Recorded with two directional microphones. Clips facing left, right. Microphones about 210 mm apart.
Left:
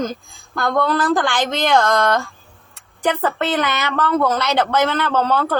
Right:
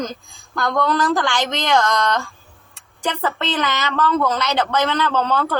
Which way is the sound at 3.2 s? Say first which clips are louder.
Left 3 dB; 15° left (ahead or behind).